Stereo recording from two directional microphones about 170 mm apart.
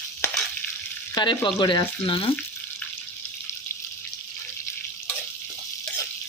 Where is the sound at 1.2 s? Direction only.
25° left (ahead or behind).